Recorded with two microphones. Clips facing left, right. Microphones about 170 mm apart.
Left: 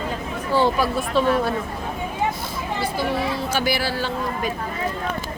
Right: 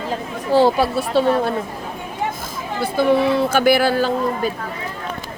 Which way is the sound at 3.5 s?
55° right (ahead or behind).